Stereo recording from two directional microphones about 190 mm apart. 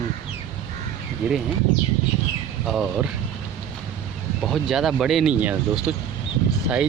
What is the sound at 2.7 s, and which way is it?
Speech, centre (ahead or behind).